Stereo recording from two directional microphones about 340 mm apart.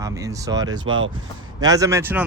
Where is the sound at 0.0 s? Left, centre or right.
Centre.